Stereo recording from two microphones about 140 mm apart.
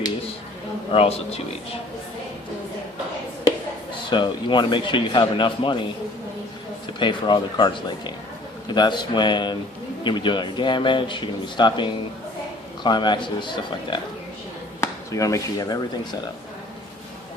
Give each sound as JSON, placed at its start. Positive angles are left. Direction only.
{"t": 0.9, "sound": "speech", "side_deg": 45}
{"t": 4.1, "sound": "speech", "side_deg": 35}
{"t": 6.8, "sound": "speech", "side_deg": 35}
{"t": 14.8, "sound": "speech", "side_deg": 25}